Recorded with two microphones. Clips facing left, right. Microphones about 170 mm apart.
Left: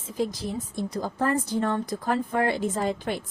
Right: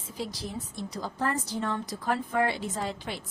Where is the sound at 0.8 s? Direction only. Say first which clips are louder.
Left 5 dB; 50° left (ahead or behind).